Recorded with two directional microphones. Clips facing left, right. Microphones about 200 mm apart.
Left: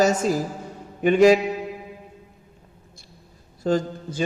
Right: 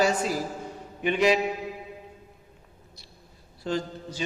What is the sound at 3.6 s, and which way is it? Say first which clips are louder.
Speech: left 7 dB; 50° left (ahead or behind).